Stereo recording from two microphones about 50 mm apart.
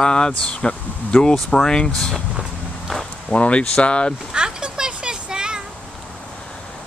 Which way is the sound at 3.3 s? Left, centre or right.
Left.